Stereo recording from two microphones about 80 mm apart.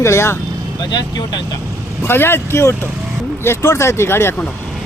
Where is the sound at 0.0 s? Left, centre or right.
Left.